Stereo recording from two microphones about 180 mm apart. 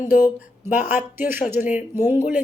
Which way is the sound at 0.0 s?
10° right (ahead or behind).